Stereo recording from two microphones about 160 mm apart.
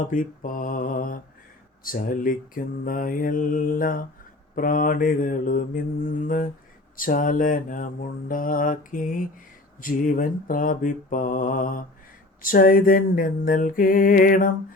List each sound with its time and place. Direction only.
0.1 s mantra: 55° left (ahead or behind)